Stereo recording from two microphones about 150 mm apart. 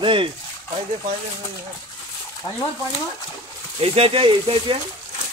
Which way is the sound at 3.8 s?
40° right (ahead or behind).